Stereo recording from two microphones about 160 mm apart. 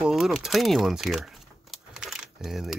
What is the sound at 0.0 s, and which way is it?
Speech, centre (ahead or behind).